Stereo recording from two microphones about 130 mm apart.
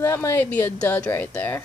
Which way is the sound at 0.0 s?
20° left (ahead or behind).